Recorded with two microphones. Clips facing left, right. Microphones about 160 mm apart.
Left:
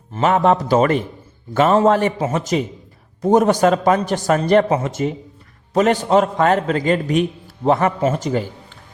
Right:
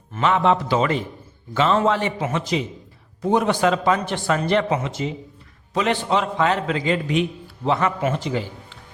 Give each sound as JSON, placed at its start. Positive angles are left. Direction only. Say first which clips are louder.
{"t": 0.1, "sound": "a man's voice", "louder": "left 3 dB", "side_deg": 45}